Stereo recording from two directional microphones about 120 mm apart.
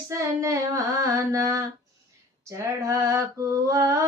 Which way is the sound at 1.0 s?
25° right (ahead or behind).